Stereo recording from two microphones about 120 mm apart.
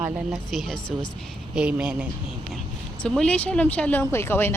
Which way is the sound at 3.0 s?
10° left (ahead or behind).